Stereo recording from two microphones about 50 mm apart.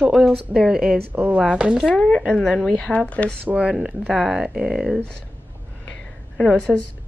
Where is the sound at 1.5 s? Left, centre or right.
Centre.